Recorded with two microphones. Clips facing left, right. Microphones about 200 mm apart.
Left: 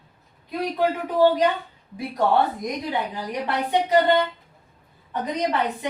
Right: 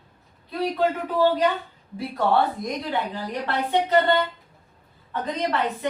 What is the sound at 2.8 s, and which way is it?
A man's voice, 15° left (ahead or behind).